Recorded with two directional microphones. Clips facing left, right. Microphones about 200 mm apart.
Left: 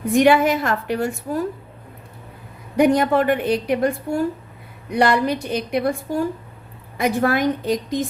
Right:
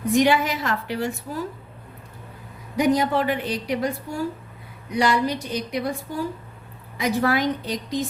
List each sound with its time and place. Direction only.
0.1 s a woman's voice: 55° left (ahead or behind)
2.7 s a woman's voice: 55° left (ahead or behind)